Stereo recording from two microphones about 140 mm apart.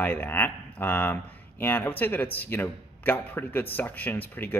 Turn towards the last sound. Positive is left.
turn(degrees=15)  # may be behind; listen again after turning